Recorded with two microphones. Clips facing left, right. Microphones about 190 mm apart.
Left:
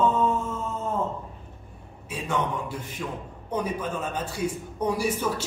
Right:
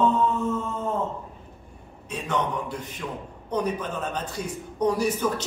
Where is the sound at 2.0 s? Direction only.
10° left (ahead or behind).